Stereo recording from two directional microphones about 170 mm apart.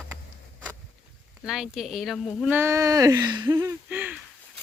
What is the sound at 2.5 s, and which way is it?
Speech, 15° right (ahead or behind).